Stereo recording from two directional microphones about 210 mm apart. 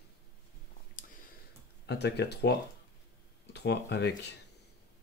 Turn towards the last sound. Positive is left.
turn(degrees=55)  # may be behind; listen again after turning